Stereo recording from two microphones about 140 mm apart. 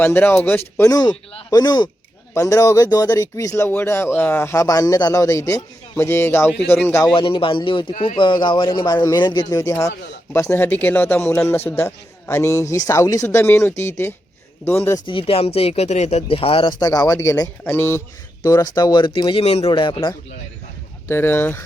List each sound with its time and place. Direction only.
0.0 s a man's voice: 15° left (ahead or behind)
0.8 s a man's voice: 25° left (ahead or behind)
7.0 s a man's voice: 35° left (ahead or behind); by 15.0 s 20° left (ahead or behind)
15.0 s speech: 40° left (ahead or behind)
16.8 s a man's voice: 25° left (ahead or behind); by 19.8 s 45° left (ahead or behind)
19.8 s a man's voice: 35° left (ahead or behind)
21.1 s a man's voice: 15° left (ahead or behind)